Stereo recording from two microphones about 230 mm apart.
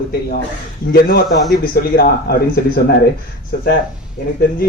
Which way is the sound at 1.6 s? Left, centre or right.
Left.